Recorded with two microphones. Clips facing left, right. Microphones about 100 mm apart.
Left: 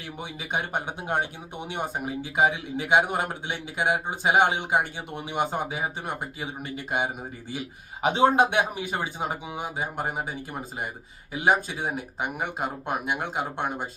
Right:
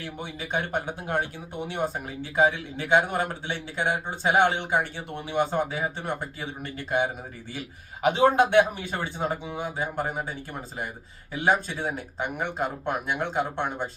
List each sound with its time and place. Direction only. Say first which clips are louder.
0.2 s speech: even; 15° left (ahead or behind)